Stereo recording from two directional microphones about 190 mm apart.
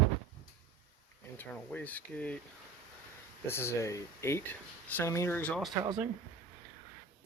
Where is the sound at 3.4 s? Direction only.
10° left (ahead or behind).